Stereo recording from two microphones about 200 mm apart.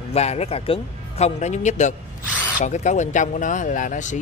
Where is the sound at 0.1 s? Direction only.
30° left (ahead or behind).